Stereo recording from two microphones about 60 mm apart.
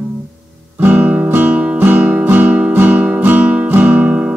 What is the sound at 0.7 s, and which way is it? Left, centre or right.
Music, right.